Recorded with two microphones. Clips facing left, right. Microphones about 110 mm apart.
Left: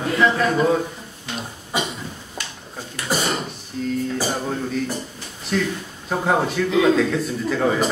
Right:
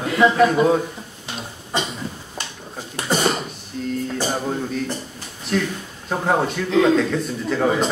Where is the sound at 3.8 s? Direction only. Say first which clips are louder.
Left 1 dB; centre (ahead or behind).